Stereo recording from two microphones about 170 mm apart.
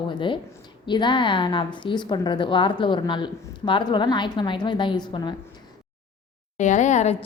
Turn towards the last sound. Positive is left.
turn(degrees=40)  # may be behind; listen again after turning